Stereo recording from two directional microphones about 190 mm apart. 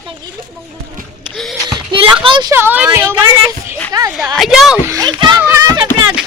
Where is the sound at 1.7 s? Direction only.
25° right (ahead or behind).